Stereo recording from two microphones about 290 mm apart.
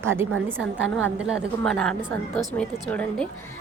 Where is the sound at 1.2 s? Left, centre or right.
Centre.